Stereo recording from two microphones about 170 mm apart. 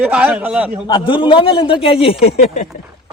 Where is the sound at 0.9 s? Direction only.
25° left (ahead or behind).